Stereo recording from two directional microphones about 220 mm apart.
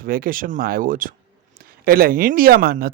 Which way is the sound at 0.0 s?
40° right (ahead or behind).